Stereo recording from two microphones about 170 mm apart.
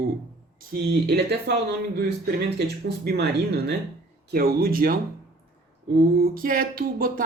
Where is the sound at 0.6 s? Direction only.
70° right (ahead or behind).